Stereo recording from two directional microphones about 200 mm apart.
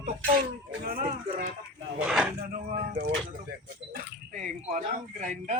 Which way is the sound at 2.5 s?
45° right (ahead or behind).